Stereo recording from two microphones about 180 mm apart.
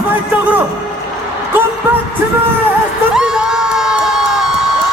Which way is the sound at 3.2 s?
5° right (ahead or behind).